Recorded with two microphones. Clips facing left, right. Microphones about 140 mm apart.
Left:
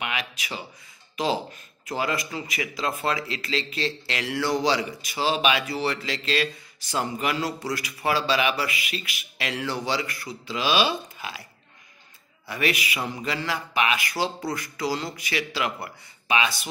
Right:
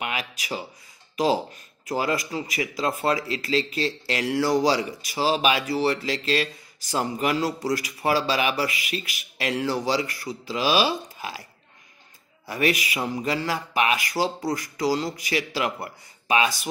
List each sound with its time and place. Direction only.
0.0 s a man's voice: 40° right (ahead or behind)
12.4 s a man's voice: 40° right (ahead or behind)